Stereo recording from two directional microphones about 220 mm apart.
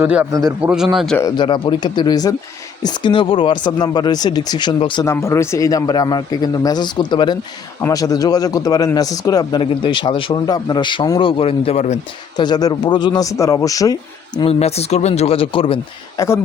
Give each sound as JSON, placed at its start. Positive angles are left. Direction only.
{"t": 0.0, "sound": "a man's voice", "side_deg": -5}
{"t": 0.9, "sound": "speech", "side_deg": 0}
{"t": 1.2, "sound": "a man's voice", "side_deg": 20}
{"t": 12.4, "sound": "speech", "side_deg": 20}